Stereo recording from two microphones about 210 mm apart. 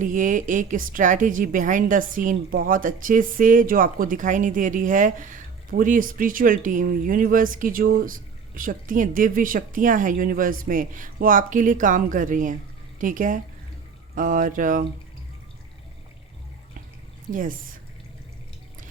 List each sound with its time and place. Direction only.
0.0 s a woman's voice: 40° right (ahead or behind)